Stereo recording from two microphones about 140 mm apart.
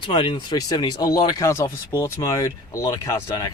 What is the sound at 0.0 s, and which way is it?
Speech, 35° left (ahead or behind).